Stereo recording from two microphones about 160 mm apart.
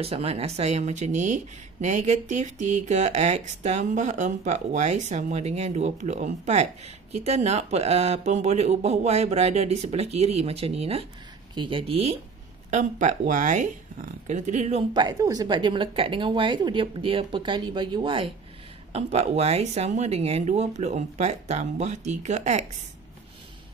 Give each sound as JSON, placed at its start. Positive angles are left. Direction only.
{"t": 0.0, "sound": "speech", "side_deg": -40}
{"t": 12.7, "sound": "speech", "side_deg": -50}
{"t": 15.0, "sound": "speech", "side_deg": -25}